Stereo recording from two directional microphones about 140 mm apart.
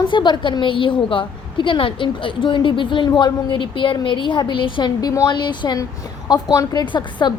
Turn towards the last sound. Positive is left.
turn(degrees=35)  # may be behind; listen again after turning